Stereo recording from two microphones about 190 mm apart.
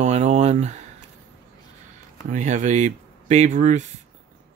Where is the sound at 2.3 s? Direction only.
40° right (ahead or behind).